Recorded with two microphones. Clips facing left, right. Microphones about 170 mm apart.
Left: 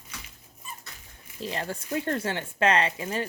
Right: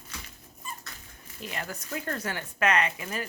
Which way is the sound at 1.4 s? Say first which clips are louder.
Left 5 dB; 30° left (ahead or behind).